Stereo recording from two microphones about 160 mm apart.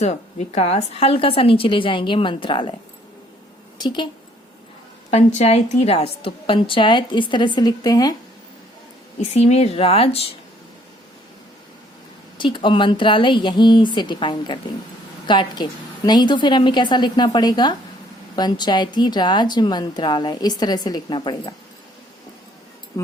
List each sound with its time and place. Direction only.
0.0 s a woman's voice: 45° left (ahead or behind)
3.8 s a woman's voice: 30° left (ahead or behind)
5.1 s a woman's voice: 45° left (ahead or behind); by 8.1 s 25° left (ahead or behind)
9.3 s a woman's voice: 40° left (ahead or behind)
12.4 s a woman's voice: 30° left (ahead or behind)